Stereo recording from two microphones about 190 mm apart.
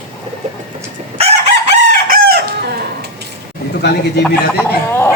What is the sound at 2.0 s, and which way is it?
Chicken, 50° right (ahead or behind).